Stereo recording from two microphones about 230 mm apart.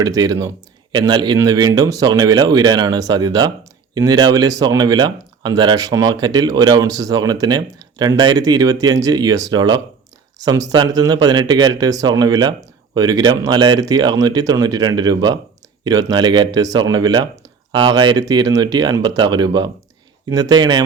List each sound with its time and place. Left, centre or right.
0.0 s speech: centre